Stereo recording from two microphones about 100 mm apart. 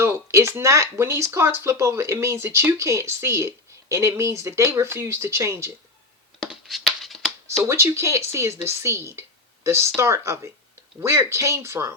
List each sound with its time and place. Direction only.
0.0 s speech: 25° right (ahead or behind)
6.4 s shuffling cards: centre (ahead or behind)
7.6 s speech: 25° right (ahead or behind)